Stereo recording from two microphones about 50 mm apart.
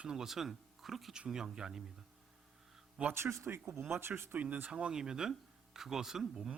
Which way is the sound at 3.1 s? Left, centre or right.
Right.